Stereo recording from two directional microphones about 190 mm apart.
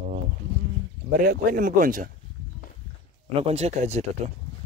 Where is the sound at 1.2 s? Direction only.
50° right (ahead or behind).